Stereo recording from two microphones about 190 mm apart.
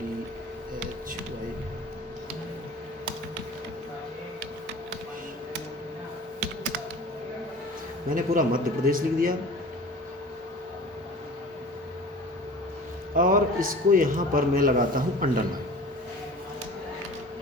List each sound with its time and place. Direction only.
8.1 s a man's voice: 45° right (ahead or behind)
13.1 s a man's voice: 45° right (ahead or behind)